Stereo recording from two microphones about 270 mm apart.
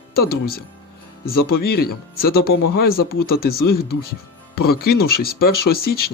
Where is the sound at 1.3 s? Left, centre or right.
Left.